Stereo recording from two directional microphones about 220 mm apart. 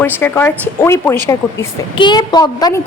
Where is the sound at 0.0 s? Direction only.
10° left (ahead or behind).